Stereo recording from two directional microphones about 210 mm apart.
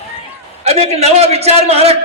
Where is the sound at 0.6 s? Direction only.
30° right (ahead or behind).